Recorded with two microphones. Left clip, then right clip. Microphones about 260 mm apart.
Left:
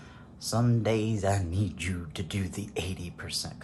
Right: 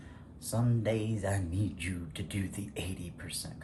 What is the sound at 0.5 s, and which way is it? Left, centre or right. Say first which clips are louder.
Speech: left 5 dB; left.